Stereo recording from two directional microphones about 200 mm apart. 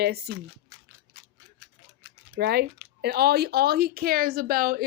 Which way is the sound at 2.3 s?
55° right (ahead or behind).